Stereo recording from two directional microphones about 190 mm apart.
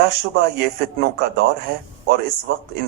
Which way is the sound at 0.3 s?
55° right (ahead or behind).